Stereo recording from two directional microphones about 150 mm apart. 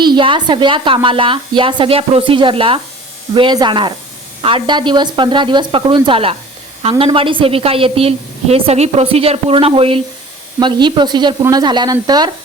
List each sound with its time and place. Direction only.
0.0 s a woman's voice: 30° right (ahead or behind)